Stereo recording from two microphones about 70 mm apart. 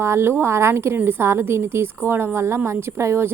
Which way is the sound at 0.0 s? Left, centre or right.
Right.